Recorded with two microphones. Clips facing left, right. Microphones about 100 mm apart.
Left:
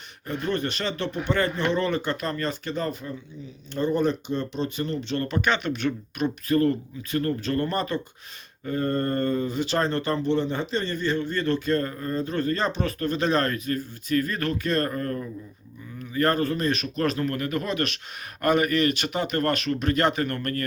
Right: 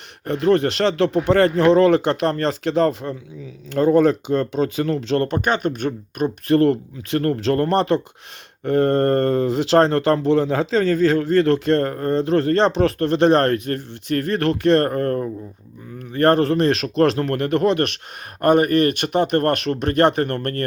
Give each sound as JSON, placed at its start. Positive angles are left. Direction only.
{"t": 0.3, "sound": "speech", "side_deg": -90}
{"t": 5.4, "sound": "speech", "side_deg": -45}
{"t": 6.5, "sound": "a man's voice", "side_deg": -70}
{"t": 18.4, "sound": "speech", "side_deg": -50}